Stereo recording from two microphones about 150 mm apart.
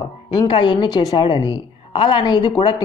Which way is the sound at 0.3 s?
30° left (ahead or behind).